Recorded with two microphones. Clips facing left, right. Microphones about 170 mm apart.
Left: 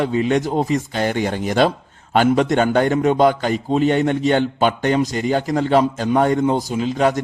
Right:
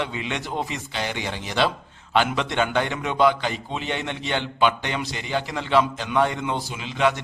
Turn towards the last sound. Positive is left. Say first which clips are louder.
# left 6 dB
turn(degrees=40)  # may be behind; listen again after turning